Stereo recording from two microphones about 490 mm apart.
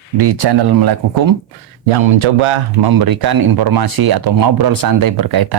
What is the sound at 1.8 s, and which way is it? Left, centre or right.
Speech, right.